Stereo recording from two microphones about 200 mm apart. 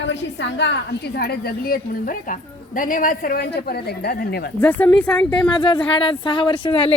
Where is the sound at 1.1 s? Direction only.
50° left (ahead or behind).